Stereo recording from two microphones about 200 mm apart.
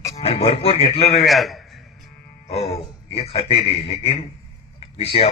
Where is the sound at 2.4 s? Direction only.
30° left (ahead or behind).